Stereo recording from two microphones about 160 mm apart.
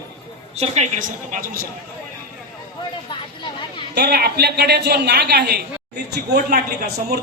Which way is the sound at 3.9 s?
85° right.